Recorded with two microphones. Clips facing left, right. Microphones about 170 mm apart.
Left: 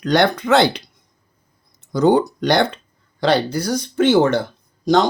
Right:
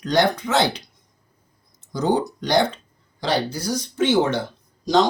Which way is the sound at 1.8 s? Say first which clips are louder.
Left 6 dB; 60° left (ahead or behind).